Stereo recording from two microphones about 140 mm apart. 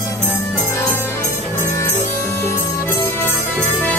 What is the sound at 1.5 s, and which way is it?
Music, 20° left (ahead or behind).